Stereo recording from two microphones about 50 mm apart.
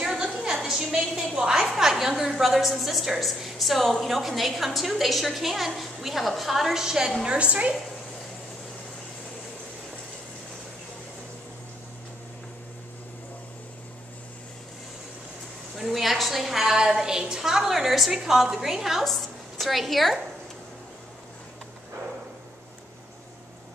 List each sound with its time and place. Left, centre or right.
0.0 s a sound: centre
1.7 s a woman's voice: centre
7.2 s a woman's voice: right
15.8 s a woman's voice: centre